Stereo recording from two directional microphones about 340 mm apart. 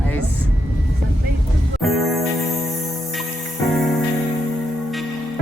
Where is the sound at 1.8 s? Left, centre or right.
Centre.